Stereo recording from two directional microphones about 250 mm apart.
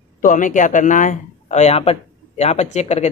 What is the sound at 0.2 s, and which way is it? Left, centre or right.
Speech, left.